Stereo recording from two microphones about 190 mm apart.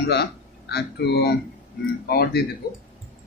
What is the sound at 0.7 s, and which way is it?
Speech, 60° left (ahead or behind).